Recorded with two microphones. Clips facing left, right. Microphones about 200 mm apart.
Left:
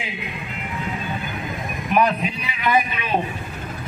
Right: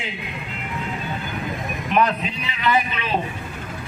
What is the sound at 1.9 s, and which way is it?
A man's voice, 10° left (ahead or behind).